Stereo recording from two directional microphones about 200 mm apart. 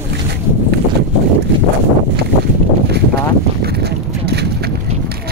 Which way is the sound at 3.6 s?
55° right (ahead or behind).